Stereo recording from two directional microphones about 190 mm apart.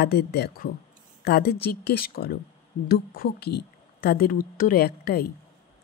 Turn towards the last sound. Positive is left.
turn(degrees=55)  # may be behind; listen again after turning